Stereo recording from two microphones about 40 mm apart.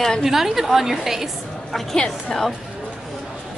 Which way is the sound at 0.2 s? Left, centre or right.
Centre.